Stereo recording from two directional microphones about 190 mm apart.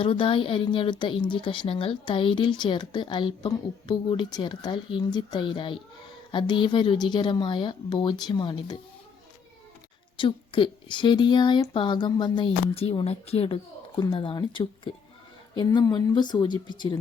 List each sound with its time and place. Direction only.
0.0 s a woman's voice: 30° left (ahead or behind)
10.2 s a woman's voice: 25° left (ahead or behind)